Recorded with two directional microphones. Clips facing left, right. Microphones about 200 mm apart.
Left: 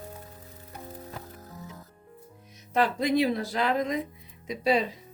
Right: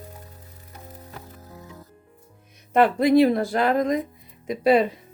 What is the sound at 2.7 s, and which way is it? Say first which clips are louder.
Speech: right 8 dB; 55° right (ahead or behind).